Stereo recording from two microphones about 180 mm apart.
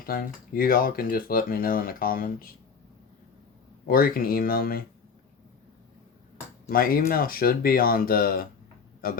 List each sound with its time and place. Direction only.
0.0 s speech: 55° left (ahead or behind)
3.8 s speech: 55° left (ahead or behind)
6.7 s speech: 55° left (ahead or behind)